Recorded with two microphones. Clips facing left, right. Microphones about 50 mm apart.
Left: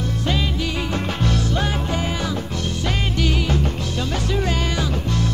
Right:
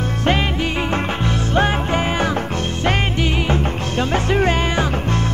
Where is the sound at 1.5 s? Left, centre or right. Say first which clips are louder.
Right 5 dB; right.